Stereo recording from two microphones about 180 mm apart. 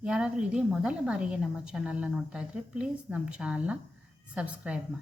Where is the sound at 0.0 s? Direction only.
5° right (ahead or behind).